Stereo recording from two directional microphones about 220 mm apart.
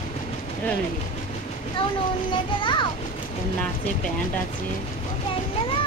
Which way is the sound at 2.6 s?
20° left (ahead or behind).